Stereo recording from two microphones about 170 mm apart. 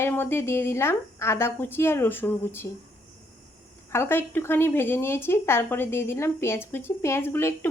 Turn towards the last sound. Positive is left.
turn(degrees=15)  # may be behind; listen again after turning